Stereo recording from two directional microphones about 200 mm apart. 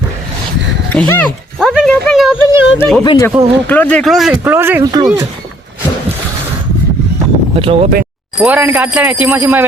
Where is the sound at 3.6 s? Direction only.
10° left (ahead or behind).